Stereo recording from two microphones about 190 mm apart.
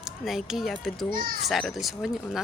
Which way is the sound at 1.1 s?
45° right (ahead or behind).